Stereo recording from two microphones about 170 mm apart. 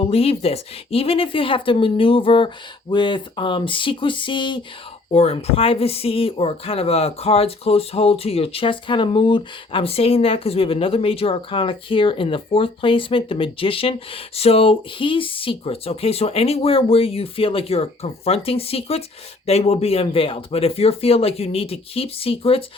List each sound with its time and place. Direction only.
0.0 s speech: 35° left (ahead or behind)